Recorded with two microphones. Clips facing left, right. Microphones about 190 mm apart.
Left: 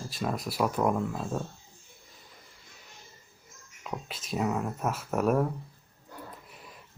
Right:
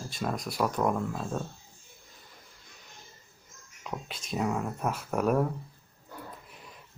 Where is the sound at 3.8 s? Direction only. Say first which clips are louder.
Even; centre (ahead or behind).